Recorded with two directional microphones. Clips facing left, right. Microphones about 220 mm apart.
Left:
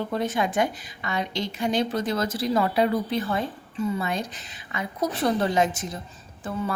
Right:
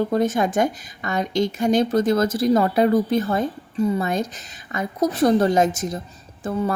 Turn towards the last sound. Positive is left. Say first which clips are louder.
# right 6 dB
turn(degrees=-45)  # may be behind; listen again after turning